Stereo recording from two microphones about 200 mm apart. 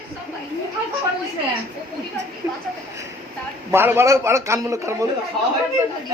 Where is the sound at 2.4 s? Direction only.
15° right (ahead or behind).